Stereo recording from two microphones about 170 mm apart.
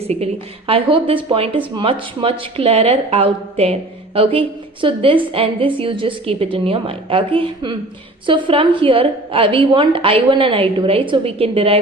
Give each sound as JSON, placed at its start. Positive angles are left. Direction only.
{"t": 0.0, "sound": "a woman's voice", "side_deg": -35}